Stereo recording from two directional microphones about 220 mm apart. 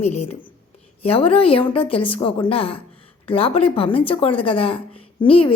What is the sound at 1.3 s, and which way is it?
A woman's voice, 25° left (ahead or behind).